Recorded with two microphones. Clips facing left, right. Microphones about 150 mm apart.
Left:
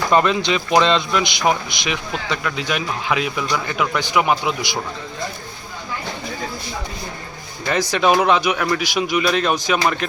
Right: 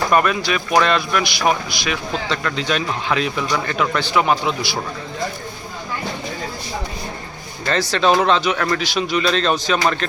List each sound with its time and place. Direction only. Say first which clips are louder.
0.1 s speech: left 3 dB; 20° left (ahead or behind)
7.6 s speech: even; 15° left (ahead or behind)